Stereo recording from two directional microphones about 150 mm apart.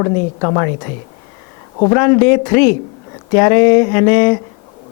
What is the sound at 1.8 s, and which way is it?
Speech, 30° left (ahead or behind).